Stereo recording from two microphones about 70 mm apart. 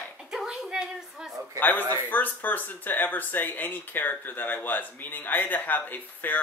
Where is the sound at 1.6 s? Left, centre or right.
Left.